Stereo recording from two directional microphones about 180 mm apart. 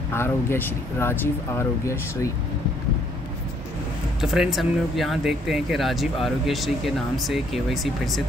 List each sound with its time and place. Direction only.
0.1 s speech: 15° left (ahead or behind)
4.2 s speech: 5° right (ahead or behind)